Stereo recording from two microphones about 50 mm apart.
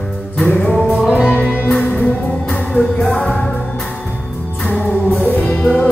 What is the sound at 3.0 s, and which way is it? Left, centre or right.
Music, centre.